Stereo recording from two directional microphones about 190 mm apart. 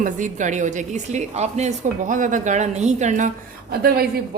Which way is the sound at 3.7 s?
55° right (ahead or behind).